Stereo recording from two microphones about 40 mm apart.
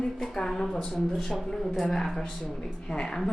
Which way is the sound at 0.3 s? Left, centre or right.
Centre.